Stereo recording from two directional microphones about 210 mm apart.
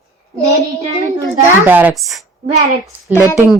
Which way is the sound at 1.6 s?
10° right (ahead or behind).